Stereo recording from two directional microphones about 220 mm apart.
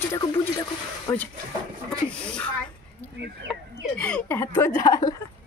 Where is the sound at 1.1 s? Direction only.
15° left (ahead or behind).